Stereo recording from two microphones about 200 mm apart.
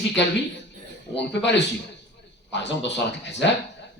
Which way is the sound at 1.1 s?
60° left (ahead or behind).